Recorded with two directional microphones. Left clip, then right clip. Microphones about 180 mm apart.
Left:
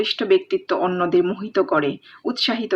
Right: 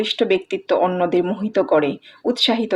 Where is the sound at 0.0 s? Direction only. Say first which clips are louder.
Even; 15° right (ahead or behind).